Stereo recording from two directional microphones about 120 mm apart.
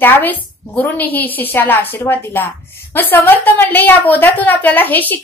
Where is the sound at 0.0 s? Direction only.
15° left (ahead or behind).